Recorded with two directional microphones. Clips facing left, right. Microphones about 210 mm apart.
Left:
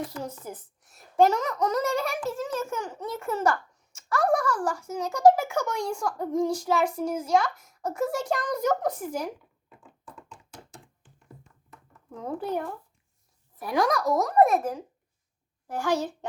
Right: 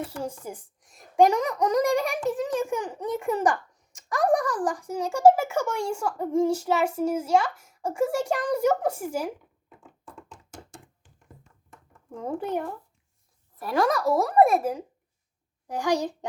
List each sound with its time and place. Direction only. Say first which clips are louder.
0.0 s a child's voice: right 2 dB; 10° right (ahead or behind)
10.3 s knock: right 2 dB; 50° right (ahead or behind)
12.1 s a child's voice: right 2 dB; 10° right (ahead or behind)
13.7 s a child's voice: right 1 dB; 5° right (ahead or behind)